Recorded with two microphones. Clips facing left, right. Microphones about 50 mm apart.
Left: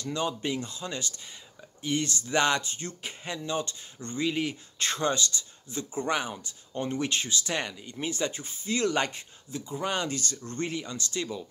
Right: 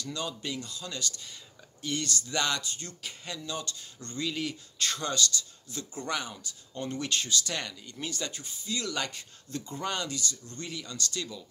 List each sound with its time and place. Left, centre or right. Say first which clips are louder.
0.0 s speech: left 5 dB; left
9.5 s speech: left 2 dB; centre
9.9 s speech: left 3 dB; left